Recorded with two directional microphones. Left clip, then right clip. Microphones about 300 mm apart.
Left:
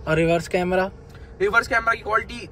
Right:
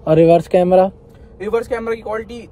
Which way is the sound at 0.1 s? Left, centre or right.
Centre.